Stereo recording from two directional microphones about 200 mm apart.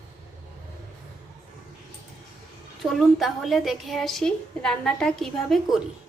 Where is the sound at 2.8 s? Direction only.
Centre (ahead or behind).